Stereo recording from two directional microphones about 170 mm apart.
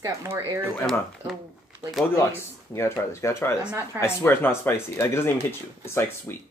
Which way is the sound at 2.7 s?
15° left (ahead or behind).